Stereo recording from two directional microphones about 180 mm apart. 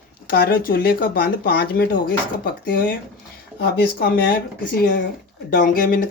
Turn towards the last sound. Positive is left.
turn(degrees=50)  # may be behind; listen again after turning